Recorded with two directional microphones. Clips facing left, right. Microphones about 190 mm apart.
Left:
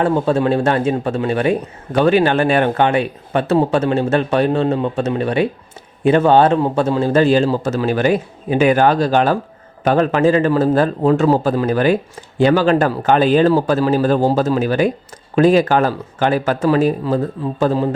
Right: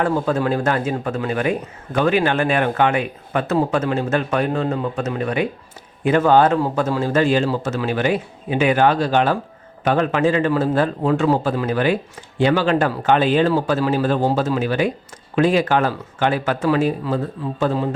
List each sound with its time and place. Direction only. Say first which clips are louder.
0.0 s speech: left 4 dB; 25° left (ahead or behind)